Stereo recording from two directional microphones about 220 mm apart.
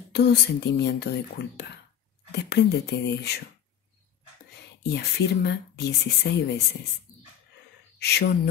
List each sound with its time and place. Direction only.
0.1 s speech: 50° left (ahead or behind)
4.6 s speech: 50° left (ahead or behind)
8.0 s speech: 50° left (ahead or behind)